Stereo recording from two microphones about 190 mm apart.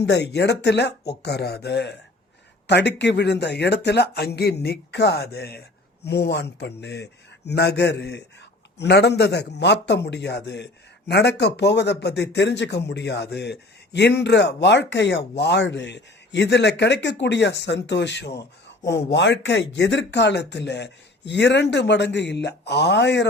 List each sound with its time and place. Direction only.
0.0 s a man's voice: 65° left (ahead or behind)